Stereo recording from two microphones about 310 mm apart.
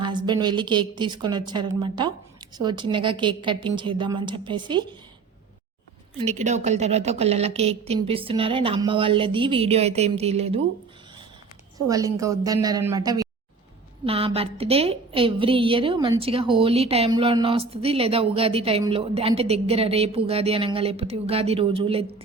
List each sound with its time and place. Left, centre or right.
0.0 s a woman's voice: centre
6.1 s a woman's voice: right
11.9 s a woman's voice: centre